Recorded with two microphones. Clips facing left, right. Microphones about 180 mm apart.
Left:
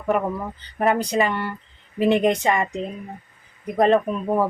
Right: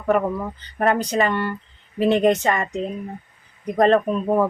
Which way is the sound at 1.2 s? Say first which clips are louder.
Right 2 dB; 15° left (ahead or behind).